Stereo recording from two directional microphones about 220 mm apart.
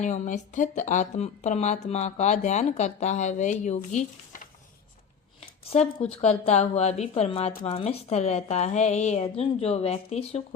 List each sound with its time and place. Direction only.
0.0 s a woman's voice: 35° left (ahead or behind)
5.4 s a sound: 30° left (ahead or behind)
6.2 s a woman's voice: 30° left (ahead or behind)